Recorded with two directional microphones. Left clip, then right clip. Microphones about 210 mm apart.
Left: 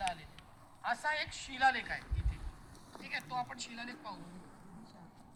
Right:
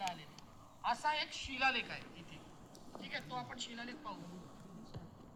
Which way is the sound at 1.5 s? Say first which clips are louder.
Left 4 dB; 20° left (ahead or behind).